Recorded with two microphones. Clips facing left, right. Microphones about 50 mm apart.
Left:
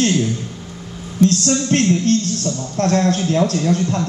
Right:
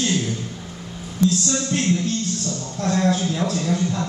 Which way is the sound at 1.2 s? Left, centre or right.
Left.